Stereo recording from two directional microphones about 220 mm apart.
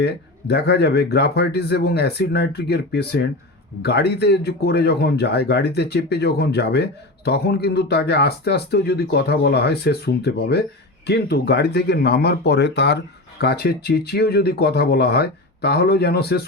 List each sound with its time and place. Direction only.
0.0 s speech: 50° left (ahead or behind)